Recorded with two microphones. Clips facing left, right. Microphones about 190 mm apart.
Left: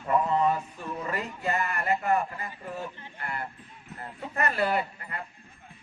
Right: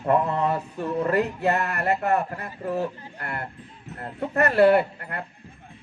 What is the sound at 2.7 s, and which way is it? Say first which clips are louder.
Speech: right 13 dB; 40° right (ahead or behind).